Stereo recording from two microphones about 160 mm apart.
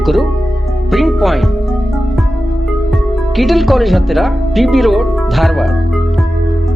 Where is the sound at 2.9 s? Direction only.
Centre (ahead or behind).